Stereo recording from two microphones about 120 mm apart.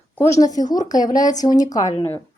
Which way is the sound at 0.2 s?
30° left (ahead or behind).